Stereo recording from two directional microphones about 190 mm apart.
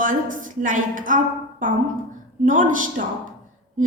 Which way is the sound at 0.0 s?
45° right (ahead or behind).